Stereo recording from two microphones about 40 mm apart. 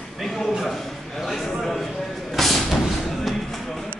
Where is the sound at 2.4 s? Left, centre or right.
Centre.